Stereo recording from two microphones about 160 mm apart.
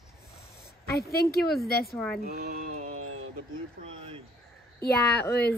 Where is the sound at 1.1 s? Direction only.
80° left.